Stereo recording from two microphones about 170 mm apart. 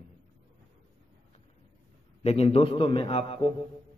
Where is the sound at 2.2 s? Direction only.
35° left (ahead or behind).